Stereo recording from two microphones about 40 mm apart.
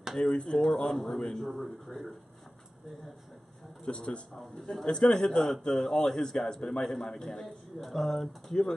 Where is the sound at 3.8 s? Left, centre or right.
Left.